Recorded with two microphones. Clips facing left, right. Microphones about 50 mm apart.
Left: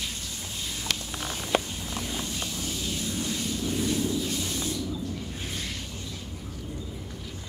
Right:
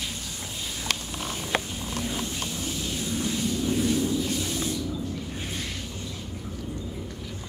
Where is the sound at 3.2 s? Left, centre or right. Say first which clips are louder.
Right 3 dB; centre.